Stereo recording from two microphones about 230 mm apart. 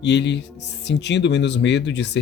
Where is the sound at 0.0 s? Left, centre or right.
Left.